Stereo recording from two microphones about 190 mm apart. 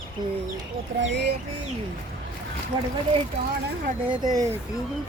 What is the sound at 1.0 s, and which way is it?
Speech, 65° right (ahead or behind).